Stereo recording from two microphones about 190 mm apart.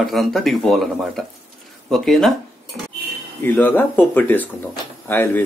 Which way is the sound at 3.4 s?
10° left (ahead or behind).